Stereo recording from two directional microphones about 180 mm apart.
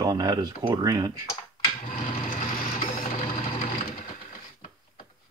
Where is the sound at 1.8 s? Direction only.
50° left (ahead or behind).